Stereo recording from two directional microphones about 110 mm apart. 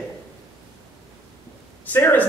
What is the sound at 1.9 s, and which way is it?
Speech, 20° left (ahead or behind).